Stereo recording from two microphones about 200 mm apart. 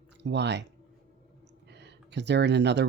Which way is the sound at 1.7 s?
60° right (ahead or behind).